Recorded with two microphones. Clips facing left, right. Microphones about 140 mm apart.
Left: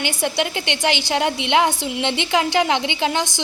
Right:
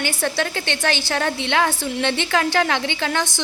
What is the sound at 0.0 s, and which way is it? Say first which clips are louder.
A woman's voice: left 1 dB; 15° left (ahead or behind).